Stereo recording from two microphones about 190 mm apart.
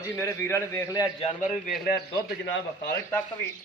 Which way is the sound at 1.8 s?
55° left (ahead or behind).